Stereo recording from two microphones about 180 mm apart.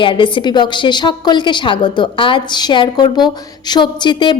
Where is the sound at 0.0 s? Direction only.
25° left (ahead or behind).